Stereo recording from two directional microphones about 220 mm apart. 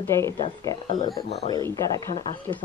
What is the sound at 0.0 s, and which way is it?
Speech, 15° left (ahead or behind).